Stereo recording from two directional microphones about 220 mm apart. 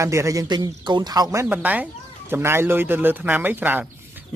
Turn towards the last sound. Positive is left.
turn(degrees=-10)  # may be behind; listen again after turning